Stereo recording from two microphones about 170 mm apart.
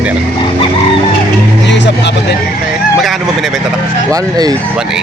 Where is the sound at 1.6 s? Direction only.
90° left.